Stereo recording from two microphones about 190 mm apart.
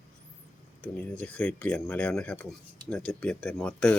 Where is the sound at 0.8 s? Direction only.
5° left (ahead or behind).